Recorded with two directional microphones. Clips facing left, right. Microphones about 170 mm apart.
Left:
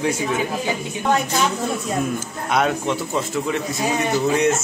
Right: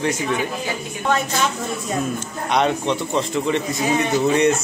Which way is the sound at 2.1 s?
5° left (ahead or behind).